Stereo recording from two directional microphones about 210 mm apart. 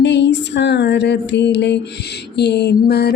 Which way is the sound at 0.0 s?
55° left (ahead or behind).